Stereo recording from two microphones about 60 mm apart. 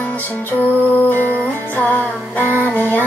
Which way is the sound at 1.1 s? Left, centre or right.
Left.